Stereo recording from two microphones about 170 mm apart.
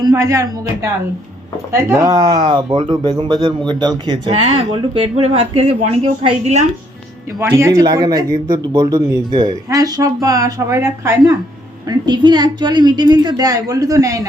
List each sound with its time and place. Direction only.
0.0 s a woman's voice: 20° right (ahead or behind); by 6.7 s 40° right (ahead or behind)
7.3 s a woman's voice: 15° right (ahead or behind)